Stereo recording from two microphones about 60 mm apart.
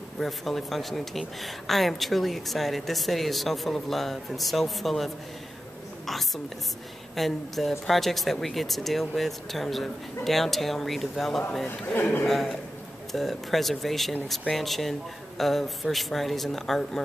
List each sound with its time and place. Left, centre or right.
0.2 s a woman's voice: centre
11.8 s a man's voice: left
12.3 s a woman's voice: centre